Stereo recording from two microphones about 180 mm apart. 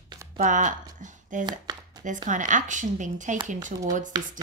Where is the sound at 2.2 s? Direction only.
45° right (ahead or behind).